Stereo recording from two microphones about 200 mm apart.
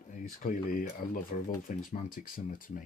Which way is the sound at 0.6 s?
45° left (ahead or behind).